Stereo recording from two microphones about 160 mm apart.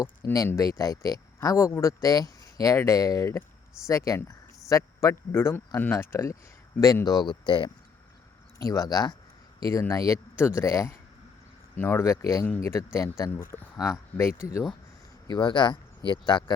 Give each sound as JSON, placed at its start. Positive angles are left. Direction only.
{"t": 0.3, "sound": "speech", "side_deg": 20}
{"t": 15.3, "sound": "speech", "side_deg": 30}